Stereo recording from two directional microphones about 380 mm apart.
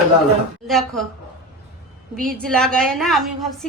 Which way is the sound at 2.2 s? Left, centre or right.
Centre.